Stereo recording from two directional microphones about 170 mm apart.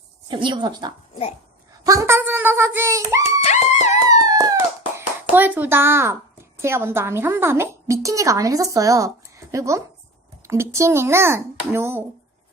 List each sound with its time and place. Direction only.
0.3 s a woman's voice: 30° right (ahead or behind)
3.4 s music: 40° left (ahead or behind)
4.2 s a child's voice: 20° right (ahead or behind)